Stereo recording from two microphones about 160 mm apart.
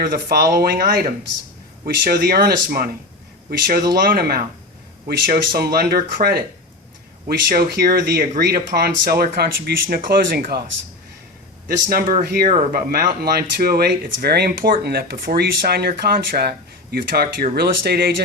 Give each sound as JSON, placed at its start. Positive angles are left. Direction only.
{"t": 0.0, "sound": "speech", "side_deg": -65}
{"t": 5.5, "sound": "speech", "side_deg": -75}
{"t": 11.9, "sound": "speech", "side_deg": -65}